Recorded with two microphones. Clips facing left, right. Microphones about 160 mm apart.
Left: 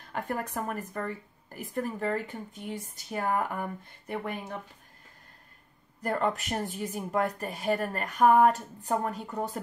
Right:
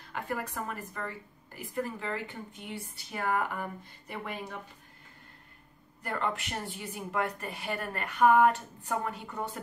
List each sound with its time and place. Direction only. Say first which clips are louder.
0.1 s a woman's voice: left 3 dB; 50° left (ahead or behind)
6.0 s speech: left 5 dB; 40° left (ahead or behind)